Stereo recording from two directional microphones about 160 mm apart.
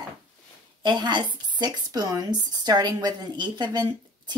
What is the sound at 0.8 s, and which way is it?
Speech, 30° right (ahead or behind).